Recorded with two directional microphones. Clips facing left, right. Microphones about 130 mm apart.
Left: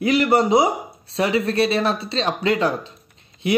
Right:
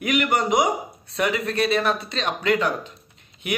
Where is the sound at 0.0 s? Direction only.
30° left (ahead or behind).